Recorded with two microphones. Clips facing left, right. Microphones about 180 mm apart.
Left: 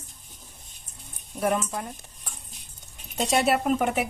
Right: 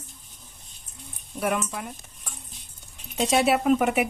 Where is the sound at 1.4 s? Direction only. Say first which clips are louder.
Left 1 dB; 30° left (ahead or behind).